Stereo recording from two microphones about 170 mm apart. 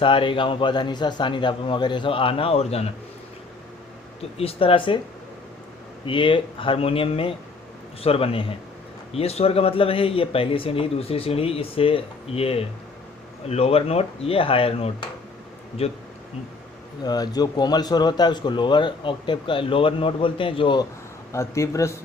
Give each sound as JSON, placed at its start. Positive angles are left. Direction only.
{"t": 0.0, "sound": "a man's voice", "side_deg": 30}
{"t": 4.4, "sound": "speech", "side_deg": 35}
{"t": 6.1, "sound": "speech", "side_deg": 30}
{"t": 17.0, "sound": "a man's voice", "side_deg": 25}
{"t": 21.3, "sound": "speech", "side_deg": 15}